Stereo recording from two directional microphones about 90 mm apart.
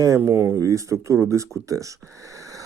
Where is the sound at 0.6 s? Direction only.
35° right (ahead or behind).